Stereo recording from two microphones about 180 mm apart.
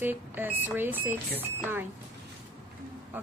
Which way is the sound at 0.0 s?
10° right (ahead or behind).